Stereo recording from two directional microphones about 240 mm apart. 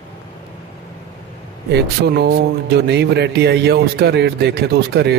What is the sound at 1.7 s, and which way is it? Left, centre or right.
Speech, right.